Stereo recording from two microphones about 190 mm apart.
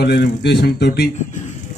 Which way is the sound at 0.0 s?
60° left (ahead or behind).